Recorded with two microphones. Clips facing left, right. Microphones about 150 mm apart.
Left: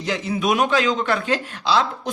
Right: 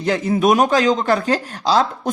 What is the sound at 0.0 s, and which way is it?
Speech, 50° right (ahead or behind).